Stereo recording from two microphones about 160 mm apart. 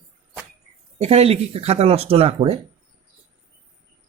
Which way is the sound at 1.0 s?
40° right (ahead or behind).